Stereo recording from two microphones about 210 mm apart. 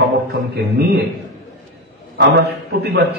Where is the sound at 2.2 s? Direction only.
50° right (ahead or behind).